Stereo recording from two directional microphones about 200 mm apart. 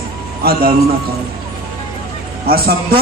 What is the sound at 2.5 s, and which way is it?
Speech, 50° right (ahead or behind).